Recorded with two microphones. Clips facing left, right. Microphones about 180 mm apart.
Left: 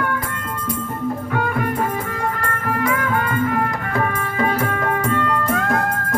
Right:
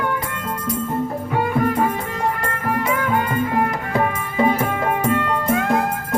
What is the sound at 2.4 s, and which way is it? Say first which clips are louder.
Music: even; 20° right (ahead or behind).